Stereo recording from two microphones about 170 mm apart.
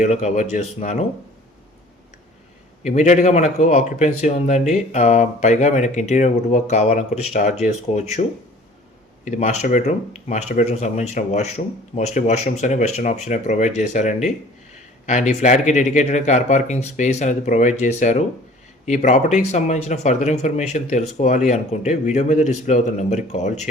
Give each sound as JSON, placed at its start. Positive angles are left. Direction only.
{"t": 0.0, "sound": "speech", "side_deg": 40}
{"t": 2.8, "sound": "speech", "side_deg": 45}
{"t": 9.2, "sound": "speech", "side_deg": 45}